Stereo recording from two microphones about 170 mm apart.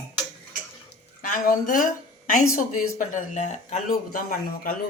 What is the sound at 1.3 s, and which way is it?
A woman's voice, 55° left (ahead or behind).